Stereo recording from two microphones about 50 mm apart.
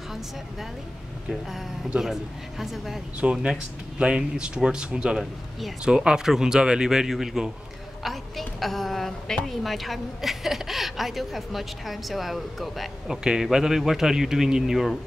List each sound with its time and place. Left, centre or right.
1.3 s a woman's voice: centre
3.2 s a man's voice: right; by 13.2 s centre
13.2 s a man's voice: centre